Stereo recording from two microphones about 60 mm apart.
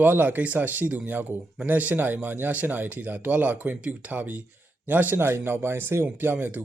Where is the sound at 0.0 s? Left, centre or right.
Right.